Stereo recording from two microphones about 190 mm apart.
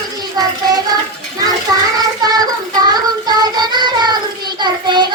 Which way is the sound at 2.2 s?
20° right (ahead or behind).